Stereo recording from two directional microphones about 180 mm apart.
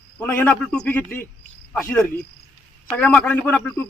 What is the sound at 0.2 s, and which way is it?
A man's voice, 10° left (ahead or behind).